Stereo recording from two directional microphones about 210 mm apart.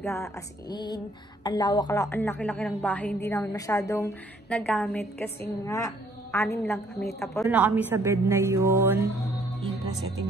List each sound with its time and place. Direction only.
0.0 s speech: 10° left (ahead or behind)
7.4 s a woman's voice: 5° right (ahead or behind)